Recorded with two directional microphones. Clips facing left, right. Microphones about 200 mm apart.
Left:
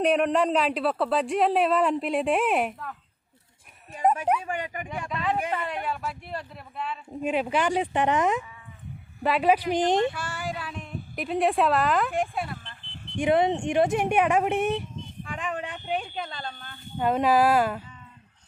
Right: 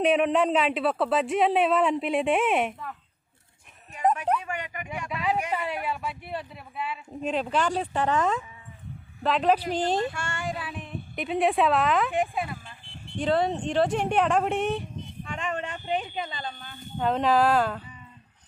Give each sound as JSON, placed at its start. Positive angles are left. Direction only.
{"t": 0.0, "sound": "speech", "side_deg": 0}
{"t": 4.4, "sound": "speech", "side_deg": 35}
{"t": 4.9, "sound": "speech", "side_deg": -5}
{"t": 7.1, "sound": "speech", "side_deg": 10}
{"t": 10.1, "sound": "speech", "side_deg": 5}
{"t": 13.1, "sound": "speech", "side_deg": 15}
{"t": 17.0, "sound": "speech", "side_deg": 10}